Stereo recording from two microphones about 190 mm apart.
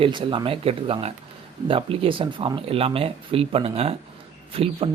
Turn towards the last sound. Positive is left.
turn(degrees=-30)  # may be behind; listen again after turning